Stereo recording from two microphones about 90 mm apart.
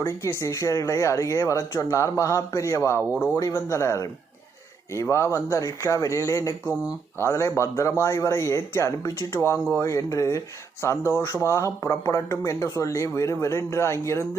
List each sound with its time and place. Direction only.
0.2 s speech: 35° left (ahead or behind)